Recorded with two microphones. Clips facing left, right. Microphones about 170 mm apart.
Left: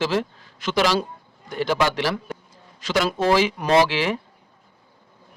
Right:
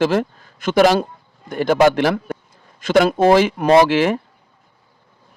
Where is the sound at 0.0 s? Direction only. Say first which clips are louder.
Right 6 dB; 50° right (ahead or behind).